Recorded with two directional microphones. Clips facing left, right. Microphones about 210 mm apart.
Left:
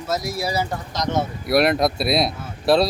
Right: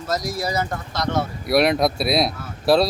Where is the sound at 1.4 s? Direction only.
Centre (ahead or behind).